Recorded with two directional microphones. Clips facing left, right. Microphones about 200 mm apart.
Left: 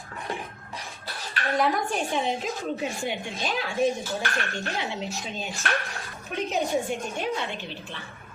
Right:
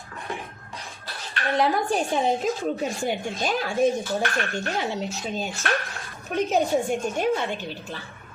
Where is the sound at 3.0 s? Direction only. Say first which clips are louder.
Right 4 dB; 45° right (ahead or behind).